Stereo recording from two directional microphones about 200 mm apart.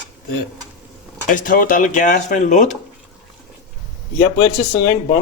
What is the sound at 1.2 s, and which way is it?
Speech, 40° left (ahead or behind).